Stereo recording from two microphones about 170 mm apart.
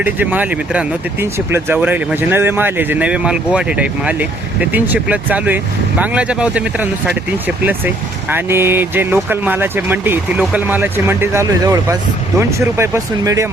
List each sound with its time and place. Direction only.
0.0 s speech: 10° right (ahead or behind)
8.3 s speech: 15° right (ahead or behind)